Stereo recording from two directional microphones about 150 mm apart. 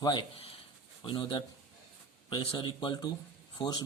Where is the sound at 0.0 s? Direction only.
30° left (ahead or behind).